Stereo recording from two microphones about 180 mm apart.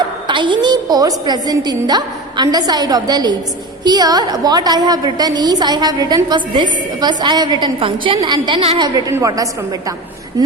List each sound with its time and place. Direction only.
0.3 s a woman's voice: 25° right (ahead or behind)
8.8 s a woman's voice: 20° right (ahead or behind)